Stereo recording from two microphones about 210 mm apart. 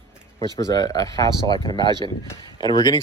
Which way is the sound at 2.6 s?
20° left (ahead or behind).